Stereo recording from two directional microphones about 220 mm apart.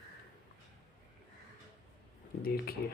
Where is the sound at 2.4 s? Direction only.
45° left (ahead or behind).